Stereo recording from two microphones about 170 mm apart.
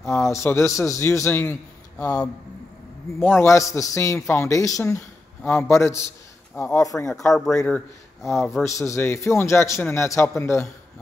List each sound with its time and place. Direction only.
0.0 s a man's voice: 15° left (ahead or behind)